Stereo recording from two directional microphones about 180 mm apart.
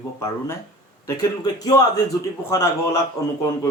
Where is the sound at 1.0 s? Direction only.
20° left (ahead or behind).